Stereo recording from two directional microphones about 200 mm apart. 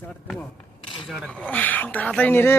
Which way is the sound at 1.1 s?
Centre (ahead or behind).